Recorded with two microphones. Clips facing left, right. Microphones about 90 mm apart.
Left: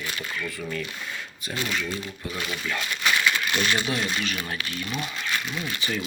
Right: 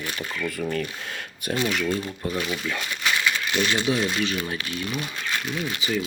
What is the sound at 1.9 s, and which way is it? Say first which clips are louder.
Speech: right 6 dB; 40° right (ahead or behind).